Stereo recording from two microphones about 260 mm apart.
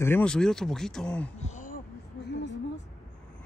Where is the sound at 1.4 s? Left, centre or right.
Left.